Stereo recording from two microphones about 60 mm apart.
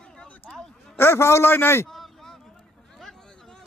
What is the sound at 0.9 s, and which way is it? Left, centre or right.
Speech, left.